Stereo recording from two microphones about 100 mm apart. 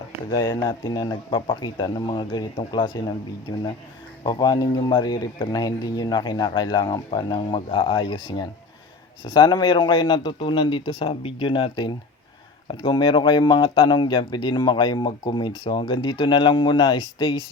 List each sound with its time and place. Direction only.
0.3 s speech: 40° left (ahead or behind)
3.5 s speech: 40° left (ahead or behind); by 17.4 s 60° left (ahead or behind)